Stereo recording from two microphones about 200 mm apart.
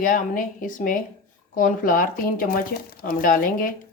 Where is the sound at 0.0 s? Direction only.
40° left (ahead or behind).